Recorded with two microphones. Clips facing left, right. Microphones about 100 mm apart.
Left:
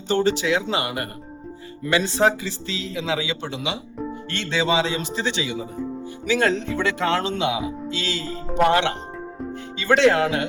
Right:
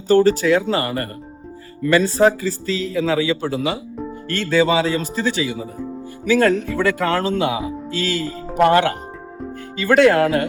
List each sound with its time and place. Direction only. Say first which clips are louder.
0.1 s speech: right 6 dB; 45° right (ahead or behind)